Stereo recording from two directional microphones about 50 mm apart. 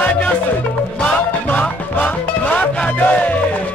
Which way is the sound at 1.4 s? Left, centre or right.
Left.